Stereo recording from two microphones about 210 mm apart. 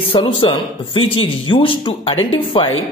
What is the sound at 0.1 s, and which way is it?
Speech, 25° left (ahead or behind).